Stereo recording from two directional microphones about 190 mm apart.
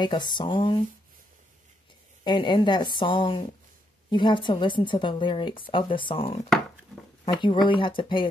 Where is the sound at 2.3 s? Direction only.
25° left (ahead or behind).